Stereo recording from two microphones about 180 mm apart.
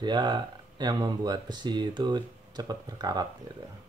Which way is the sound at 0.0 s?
25° right (ahead or behind).